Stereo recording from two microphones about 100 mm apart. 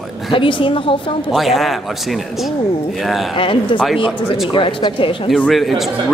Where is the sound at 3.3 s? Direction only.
60° left (ahead or behind).